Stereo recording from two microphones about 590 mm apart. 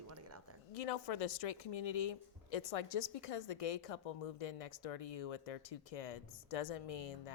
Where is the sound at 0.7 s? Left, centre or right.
Left.